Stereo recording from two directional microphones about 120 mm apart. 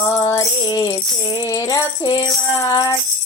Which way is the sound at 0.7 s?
30° left (ahead or behind).